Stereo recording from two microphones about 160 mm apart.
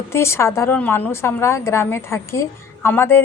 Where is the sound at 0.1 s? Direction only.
15° left (ahead or behind).